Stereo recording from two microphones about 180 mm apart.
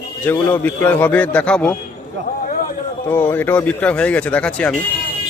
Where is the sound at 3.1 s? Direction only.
10° left (ahead or behind).